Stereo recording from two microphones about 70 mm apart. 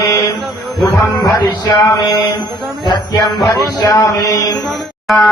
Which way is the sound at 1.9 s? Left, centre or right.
Left.